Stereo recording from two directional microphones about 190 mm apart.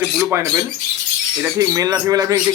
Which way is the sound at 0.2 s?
10° right (ahead or behind).